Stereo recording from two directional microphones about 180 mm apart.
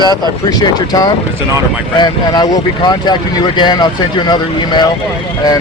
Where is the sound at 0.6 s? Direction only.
20° left (ahead or behind).